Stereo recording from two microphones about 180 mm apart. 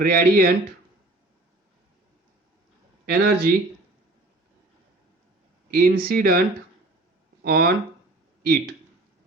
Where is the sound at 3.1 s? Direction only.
60° right (ahead or behind).